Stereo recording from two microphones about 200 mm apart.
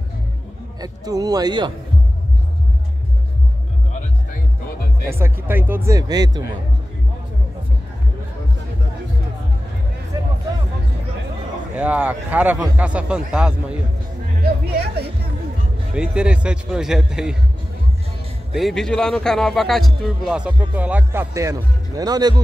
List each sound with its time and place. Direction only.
0.7 s a man's voice: 20° right (ahead or behind)
5.1 s a man's voice: 10° right (ahead or behind)
11.7 s a man's voice: 5° right (ahead or behind)
14.4 s a sound: 50° right (ahead or behind)
16.0 s speech: 5° right (ahead or behind)
18.5 s speech: centre (ahead or behind); by 22.3 s 20° right (ahead or behind)